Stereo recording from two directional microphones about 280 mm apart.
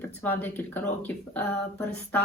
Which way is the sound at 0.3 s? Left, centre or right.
Centre.